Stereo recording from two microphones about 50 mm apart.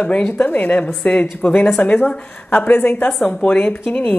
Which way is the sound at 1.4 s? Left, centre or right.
Centre.